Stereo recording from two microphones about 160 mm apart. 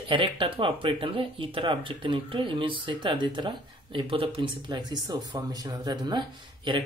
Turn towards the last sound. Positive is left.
turn(degrees=-30)  # may be behind; listen again after turning